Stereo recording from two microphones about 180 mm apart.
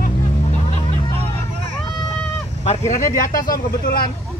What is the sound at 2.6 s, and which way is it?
Speech, 40° left (ahead or behind).